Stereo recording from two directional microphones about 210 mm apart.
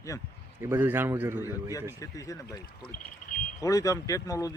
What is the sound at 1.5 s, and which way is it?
Speech, 15° left (ahead or behind).